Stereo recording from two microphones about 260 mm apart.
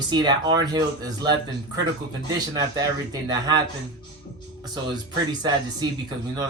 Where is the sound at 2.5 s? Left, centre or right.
Centre.